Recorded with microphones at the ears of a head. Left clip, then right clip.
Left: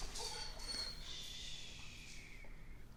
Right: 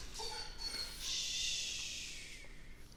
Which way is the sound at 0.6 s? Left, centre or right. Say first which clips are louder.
Right 4 dB; right.